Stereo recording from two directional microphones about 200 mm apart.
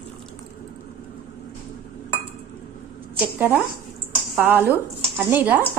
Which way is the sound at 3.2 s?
10° right (ahead or behind).